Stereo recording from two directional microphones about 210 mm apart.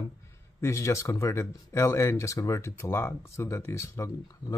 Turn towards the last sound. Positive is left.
turn(degrees=15)  # may be behind; listen again after turning